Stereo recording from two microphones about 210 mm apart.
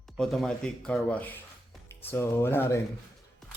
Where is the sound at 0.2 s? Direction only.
Centre (ahead or behind).